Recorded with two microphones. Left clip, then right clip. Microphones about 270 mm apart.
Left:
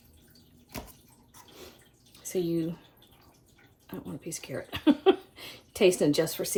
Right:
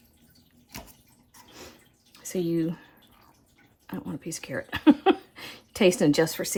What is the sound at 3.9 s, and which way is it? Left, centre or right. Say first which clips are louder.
Speech: right 3 dB; right.